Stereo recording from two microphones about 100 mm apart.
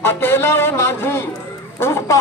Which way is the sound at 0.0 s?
25° left (ahead or behind).